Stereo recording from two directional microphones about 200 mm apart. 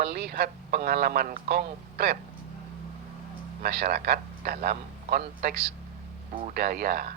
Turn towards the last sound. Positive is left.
turn(degrees=-50)  # may be behind; listen again after turning